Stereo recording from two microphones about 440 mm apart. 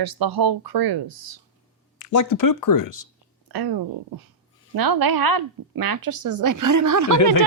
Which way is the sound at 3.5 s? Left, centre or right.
Right.